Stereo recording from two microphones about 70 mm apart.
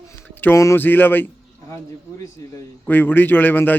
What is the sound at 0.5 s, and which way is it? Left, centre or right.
Speech, left.